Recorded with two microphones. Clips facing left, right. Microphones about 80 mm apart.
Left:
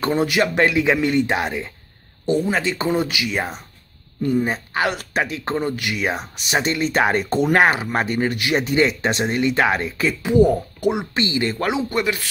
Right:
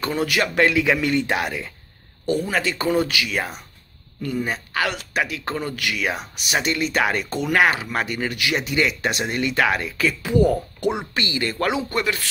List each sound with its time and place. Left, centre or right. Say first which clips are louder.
0.0 s speech: left 4 dB; left
0.3 s speech: left 1 dB; left
11.1 s speech: left 3 dB; left